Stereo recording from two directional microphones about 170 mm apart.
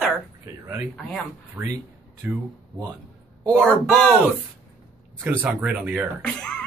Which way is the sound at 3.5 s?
5° left (ahead or behind).